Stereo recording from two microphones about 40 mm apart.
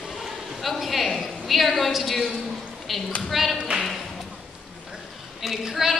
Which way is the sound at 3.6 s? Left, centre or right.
Centre.